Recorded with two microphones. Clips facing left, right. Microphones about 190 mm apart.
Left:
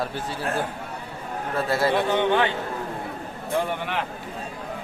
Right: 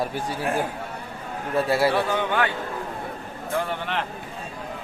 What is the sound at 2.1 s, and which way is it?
Speech, 25° left (ahead or behind).